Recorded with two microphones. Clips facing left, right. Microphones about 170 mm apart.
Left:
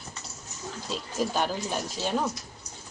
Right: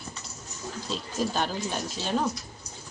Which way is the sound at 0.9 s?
10° left (ahead or behind).